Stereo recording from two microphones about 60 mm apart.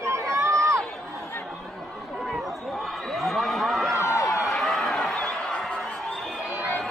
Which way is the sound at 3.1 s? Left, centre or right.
Centre.